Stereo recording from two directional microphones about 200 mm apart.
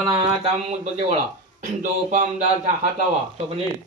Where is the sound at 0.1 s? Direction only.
25° right (ahead or behind).